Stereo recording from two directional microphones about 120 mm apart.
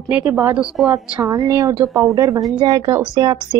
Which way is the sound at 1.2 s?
25° right (ahead or behind).